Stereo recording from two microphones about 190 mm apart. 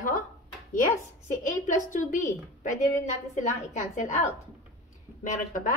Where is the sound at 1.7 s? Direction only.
40° left (ahead or behind).